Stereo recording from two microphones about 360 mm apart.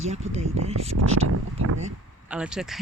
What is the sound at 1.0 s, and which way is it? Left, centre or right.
Speech, right.